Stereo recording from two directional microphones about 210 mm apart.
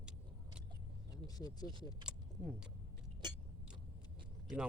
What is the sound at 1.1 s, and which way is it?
Speech, 20° left (ahead or behind).